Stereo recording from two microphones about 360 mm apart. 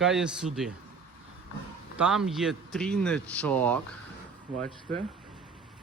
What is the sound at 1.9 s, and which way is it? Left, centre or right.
Speech, centre.